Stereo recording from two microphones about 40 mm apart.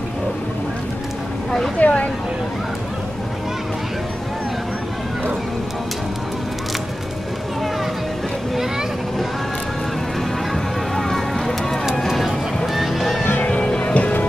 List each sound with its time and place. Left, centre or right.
1.8 s speech: left
10.5 s a sound: centre
12.1 s a sound: centre
12.7 s boat: centre
13.2 s music: left
13.5 s music: left